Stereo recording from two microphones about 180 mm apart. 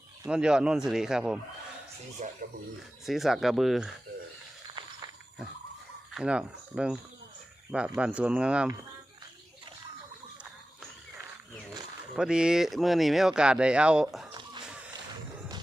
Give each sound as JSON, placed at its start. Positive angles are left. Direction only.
{"t": 0.3, "sound": "speech", "side_deg": -5}
{"t": 2.2, "sound": "speech", "side_deg": -40}
{"t": 3.1, "sound": "speech", "side_deg": 0}
{"t": 6.1, "sound": "speech", "side_deg": -5}
{"t": 12.1, "sound": "speech", "side_deg": -5}
{"t": 14.6, "sound": "a sound", "side_deg": -5}